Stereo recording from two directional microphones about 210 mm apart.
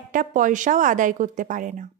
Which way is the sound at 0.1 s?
40° right (ahead or behind).